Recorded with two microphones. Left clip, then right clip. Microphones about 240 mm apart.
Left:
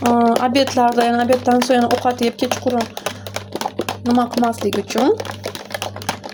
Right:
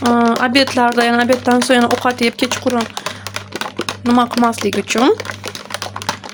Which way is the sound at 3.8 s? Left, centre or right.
Right.